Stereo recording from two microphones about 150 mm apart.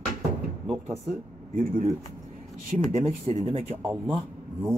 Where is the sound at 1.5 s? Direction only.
65° right (ahead or behind).